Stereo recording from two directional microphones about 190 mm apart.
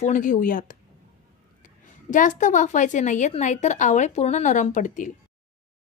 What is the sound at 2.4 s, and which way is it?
A woman's voice, 40° left (ahead or behind).